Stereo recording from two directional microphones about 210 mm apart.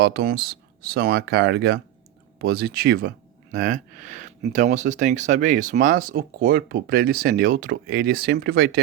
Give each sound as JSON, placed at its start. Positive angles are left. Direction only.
{"t": 0.0, "sound": "speech", "side_deg": -50}